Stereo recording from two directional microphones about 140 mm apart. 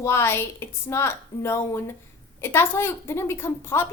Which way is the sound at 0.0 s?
20° left (ahead or behind).